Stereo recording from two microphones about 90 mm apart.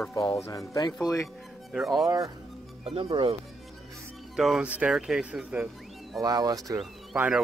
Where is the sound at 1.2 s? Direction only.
Centre (ahead or behind).